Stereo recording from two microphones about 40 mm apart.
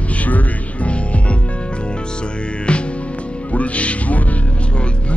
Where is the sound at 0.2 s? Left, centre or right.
Left.